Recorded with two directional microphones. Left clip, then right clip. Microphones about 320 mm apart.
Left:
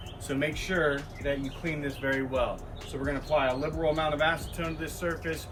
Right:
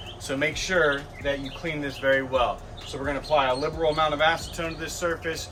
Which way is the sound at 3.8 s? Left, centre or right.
Centre.